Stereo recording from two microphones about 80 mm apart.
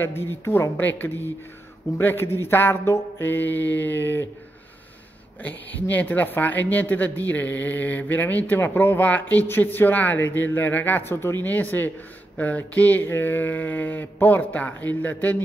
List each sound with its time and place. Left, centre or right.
0.0 s speech: left
5.4 s speech: left